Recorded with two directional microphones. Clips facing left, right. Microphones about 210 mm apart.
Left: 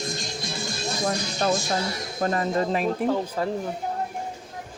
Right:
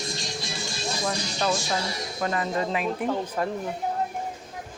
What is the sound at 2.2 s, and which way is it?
Speech, 40° left (ahead or behind).